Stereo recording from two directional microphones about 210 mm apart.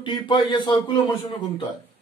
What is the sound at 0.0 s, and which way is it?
Speech, 20° left (ahead or behind).